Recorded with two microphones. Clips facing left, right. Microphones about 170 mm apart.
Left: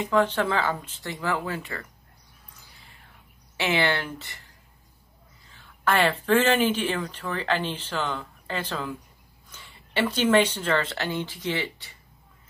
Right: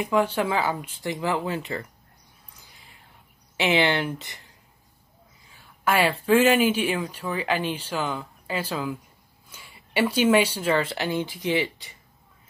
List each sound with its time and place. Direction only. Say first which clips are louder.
0.0 s speech: even; 10° right (ahead or behind)
3.5 s speech: right 3 dB; 15° right (ahead or behind)
5.5 s speech: right 1 dB; 10° right (ahead or behind)